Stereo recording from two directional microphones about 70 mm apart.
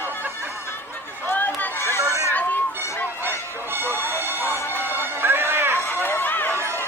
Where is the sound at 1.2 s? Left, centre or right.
Left.